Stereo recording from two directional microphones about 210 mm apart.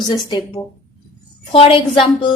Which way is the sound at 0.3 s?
20° left (ahead or behind).